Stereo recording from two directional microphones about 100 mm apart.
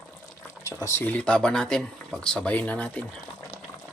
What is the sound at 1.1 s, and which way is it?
Speech, 10° left (ahead or behind).